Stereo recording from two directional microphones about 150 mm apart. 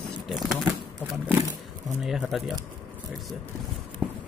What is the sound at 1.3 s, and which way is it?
Roaring cats, 20° right (ahead or behind).